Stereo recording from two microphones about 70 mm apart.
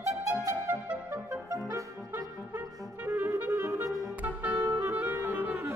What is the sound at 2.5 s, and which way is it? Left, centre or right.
Music, right.